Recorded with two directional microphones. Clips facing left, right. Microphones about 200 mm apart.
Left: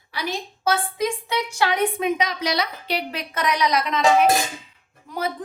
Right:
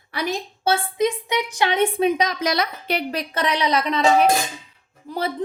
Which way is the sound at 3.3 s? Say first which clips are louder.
Even; 30° right (ahead or behind).